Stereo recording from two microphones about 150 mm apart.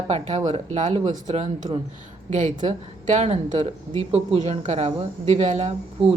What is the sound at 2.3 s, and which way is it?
Speech, 55° right (ahead or behind).